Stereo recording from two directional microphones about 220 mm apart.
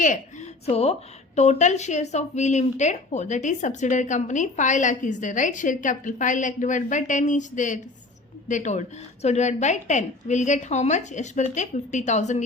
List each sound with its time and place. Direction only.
0.0 s a woman's voice: 35° left (ahead or behind)